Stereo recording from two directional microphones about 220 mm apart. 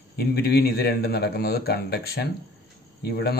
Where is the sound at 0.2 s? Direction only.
45° left (ahead or behind).